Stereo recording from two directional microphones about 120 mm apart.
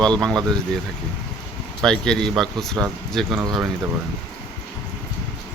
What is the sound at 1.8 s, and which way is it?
Speech, 5° left (ahead or behind).